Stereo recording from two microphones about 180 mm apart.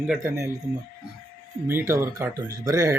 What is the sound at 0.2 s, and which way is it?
Speech, 15° right (ahead or behind).